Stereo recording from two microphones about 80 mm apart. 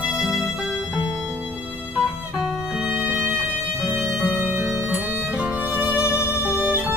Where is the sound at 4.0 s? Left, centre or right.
Centre.